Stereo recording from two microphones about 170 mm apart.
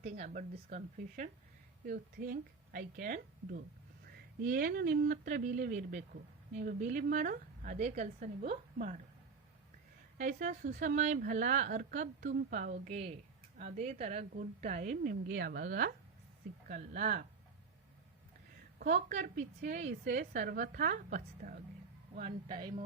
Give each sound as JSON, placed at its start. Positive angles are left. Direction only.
{"t": 0.0, "sound": "a woman's voice", "side_deg": -40}
{"t": 10.2, "sound": "a woman's voice", "side_deg": -45}
{"t": 15.1, "sound": "a woman's voice", "side_deg": -65}
{"t": 18.8, "sound": "a woman's voice", "side_deg": -60}
{"t": 19.4, "sound": "a woman's voice", "side_deg": -45}